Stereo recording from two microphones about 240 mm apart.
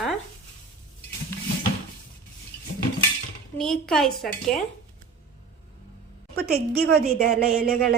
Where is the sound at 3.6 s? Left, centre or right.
Centre.